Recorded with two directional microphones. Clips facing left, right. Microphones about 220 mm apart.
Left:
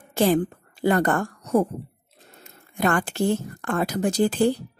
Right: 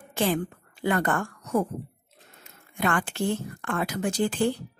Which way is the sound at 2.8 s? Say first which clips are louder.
Left 4 dB; 40° left (ahead or behind).